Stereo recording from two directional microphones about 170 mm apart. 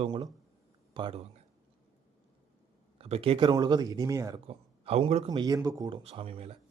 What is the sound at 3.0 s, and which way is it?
A man's voice, 35° right (ahead or behind).